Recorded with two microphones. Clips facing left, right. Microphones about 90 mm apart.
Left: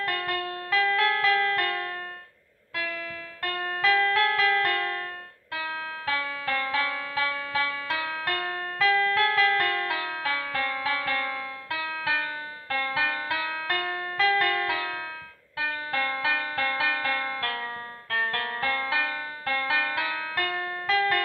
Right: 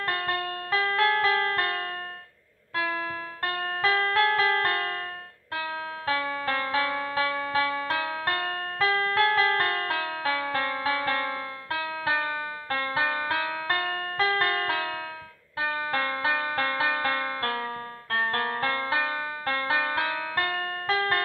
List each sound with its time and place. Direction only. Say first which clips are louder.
0.0 s music: right 1 dB; 35° right (ahead or behind)